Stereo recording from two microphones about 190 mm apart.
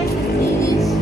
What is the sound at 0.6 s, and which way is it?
Music, 15° left (ahead or behind).